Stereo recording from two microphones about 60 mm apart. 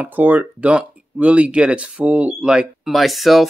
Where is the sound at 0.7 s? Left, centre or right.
Centre.